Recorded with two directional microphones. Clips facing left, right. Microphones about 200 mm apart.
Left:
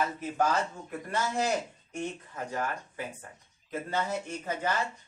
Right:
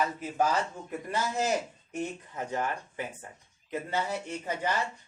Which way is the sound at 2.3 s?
20° right (ahead or behind).